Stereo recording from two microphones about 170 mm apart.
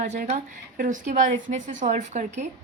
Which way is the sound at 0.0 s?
45° right (ahead or behind).